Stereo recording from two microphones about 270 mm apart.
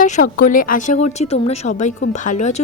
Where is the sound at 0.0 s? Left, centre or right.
Left.